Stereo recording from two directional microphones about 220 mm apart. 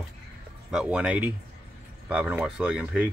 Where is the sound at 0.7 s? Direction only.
5° right (ahead or behind).